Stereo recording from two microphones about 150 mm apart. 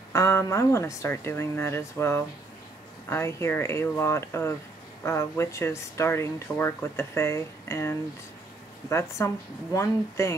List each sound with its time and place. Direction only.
0.1 s speech: 20° left (ahead or behind)